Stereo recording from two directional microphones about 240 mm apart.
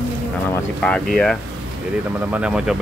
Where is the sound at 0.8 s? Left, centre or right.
Centre.